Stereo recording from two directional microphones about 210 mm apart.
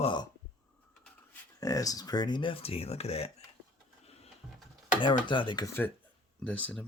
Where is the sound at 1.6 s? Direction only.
15° left (ahead or behind).